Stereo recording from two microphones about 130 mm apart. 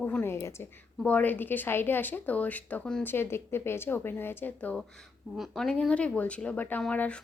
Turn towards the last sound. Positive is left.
turn(degrees=10)  # may be behind; listen again after turning